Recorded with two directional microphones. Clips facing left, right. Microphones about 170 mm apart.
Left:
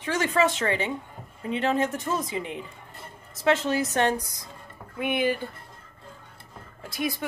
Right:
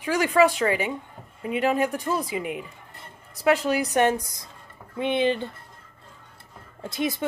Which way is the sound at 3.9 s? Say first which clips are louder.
Right 3 dB; 20° right (ahead or behind).